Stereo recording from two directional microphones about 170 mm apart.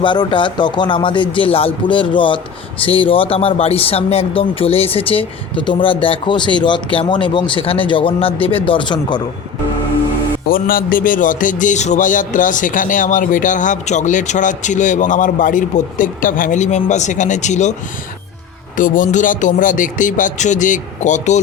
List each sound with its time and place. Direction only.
0.0 s speech: 30° left (ahead or behind)
10.5 s a man's voice: 55° left (ahead or behind)
18.8 s a man's voice: 50° left (ahead or behind)